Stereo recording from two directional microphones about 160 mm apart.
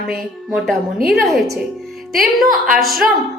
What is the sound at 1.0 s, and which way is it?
A woman's voice, centre (ahead or behind).